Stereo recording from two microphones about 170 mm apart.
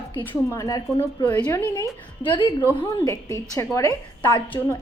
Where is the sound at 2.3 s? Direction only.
30° left (ahead or behind).